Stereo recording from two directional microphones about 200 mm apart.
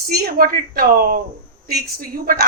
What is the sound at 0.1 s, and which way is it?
A woman's voice, 50° right (ahead or behind).